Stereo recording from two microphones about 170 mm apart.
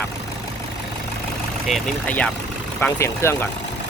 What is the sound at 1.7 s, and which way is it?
Speech, 10° left (ahead or behind).